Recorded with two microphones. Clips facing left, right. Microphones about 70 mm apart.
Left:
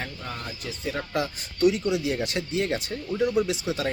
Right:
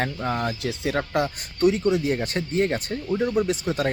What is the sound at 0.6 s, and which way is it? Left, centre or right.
Speech, right.